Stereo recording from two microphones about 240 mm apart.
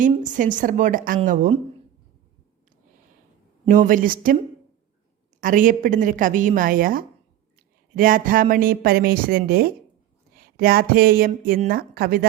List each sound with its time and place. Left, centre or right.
0.0 s a woman's voice: right
3.7 s a woman's voice: right
5.4 s a woman's voice: right